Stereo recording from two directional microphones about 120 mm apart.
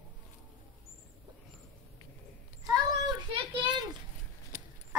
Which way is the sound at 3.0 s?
40° right (ahead or behind).